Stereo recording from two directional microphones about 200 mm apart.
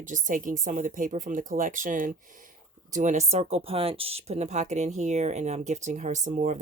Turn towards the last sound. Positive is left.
turn(degrees=-35)  # may be behind; listen again after turning